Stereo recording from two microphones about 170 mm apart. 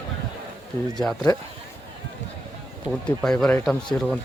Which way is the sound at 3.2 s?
5° left (ahead or behind).